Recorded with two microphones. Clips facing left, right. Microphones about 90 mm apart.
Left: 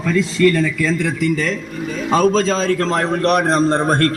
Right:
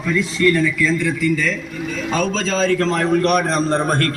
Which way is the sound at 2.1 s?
35° left (ahead or behind).